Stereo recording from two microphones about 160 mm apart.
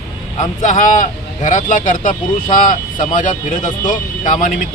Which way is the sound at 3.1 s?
50° left (ahead or behind).